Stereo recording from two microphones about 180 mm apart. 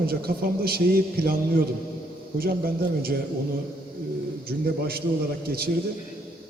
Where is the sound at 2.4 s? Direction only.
55° right (ahead or behind).